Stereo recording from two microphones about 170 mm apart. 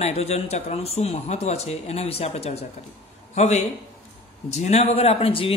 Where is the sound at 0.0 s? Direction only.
40° left (ahead or behind).